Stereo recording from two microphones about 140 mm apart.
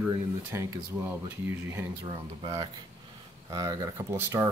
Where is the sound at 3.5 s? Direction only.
25° right (ahead or behind).